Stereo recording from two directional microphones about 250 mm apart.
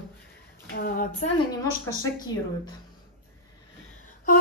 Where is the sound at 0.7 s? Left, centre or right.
Left.